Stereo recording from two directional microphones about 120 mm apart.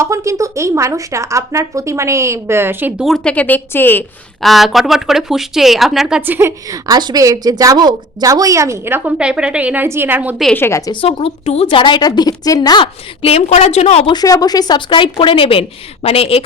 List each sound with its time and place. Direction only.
0.0 s a woman's voice: 25° right (ahead or behind)
3.0 s speech: centre (ahead or behind)
3.3 s a woman's voice: 15° left (ahead or behind)
4.4 s speech: centre (ahead or behind)
6.2 s a woman's voice: 15° right (ahead or behind)
6.7 s a woman's voice: 30° right (ahead or behind)
9.1 s a woman's voice: 10° right (ahead or behind)
10.5 s a woman's voice: 20° left (ahead or behind)
11.0 s a woman's voice: 55° left (ahead or behind); by 12.9 s 35° left (ahead or behind)
13.2 s a woman's voice: 60° left (ahead or behind)
14.1 s a woman's voice: 35° left (ahead or behind); by 16.4 s 55° left (ahead or behind)